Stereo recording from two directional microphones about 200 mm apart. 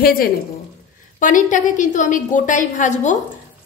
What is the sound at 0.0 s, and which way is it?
A woman's voice, 45° left (ahead or behind).